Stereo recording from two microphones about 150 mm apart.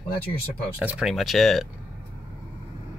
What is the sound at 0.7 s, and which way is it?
Speech, 5° right (ahead or behind).